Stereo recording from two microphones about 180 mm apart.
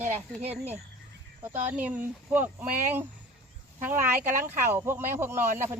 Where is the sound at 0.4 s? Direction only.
35° right (ahead or behind).